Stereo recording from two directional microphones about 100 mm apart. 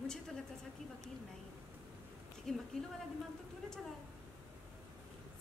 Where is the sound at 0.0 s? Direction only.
5° left (ahead or behind).